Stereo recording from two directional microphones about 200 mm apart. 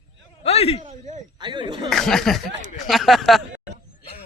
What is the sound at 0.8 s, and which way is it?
Speech, 35° right (ahead or behind).